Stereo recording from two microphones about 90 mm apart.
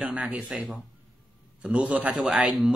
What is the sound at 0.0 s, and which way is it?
Speech, 15° right (ahead or behind).